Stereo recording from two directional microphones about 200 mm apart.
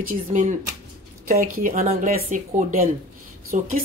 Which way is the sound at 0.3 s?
40° right (ahead or behind).